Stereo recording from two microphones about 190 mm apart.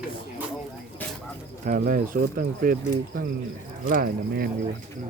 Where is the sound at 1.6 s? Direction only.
45° right (ahead or behind).